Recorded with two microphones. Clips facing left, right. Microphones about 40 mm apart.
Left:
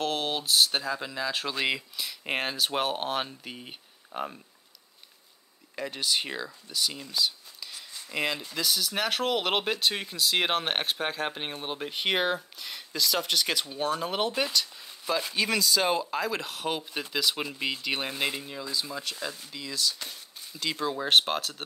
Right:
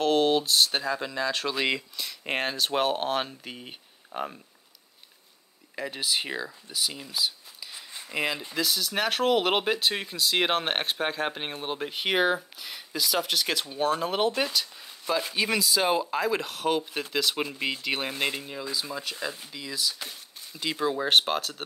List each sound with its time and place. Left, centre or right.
0.0 s speech: centre
5.8 s speech: centre
7.7 s a sound: right
8.1 s speech: centre